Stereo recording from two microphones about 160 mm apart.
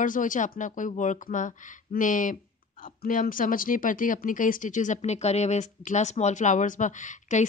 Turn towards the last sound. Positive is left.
turn(degrees=50)  # may be behind; listen again after turning